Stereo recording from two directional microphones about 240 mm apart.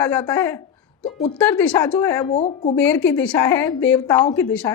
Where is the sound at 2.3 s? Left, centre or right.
Left.